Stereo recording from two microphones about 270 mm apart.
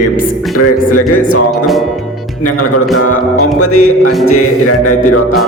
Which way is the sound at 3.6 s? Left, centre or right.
Left.